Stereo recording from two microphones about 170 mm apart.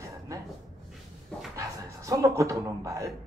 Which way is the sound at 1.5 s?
20° right (ahead or behind).